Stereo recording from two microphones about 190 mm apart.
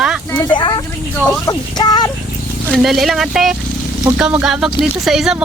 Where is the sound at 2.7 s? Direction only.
Centre (ahead or behind).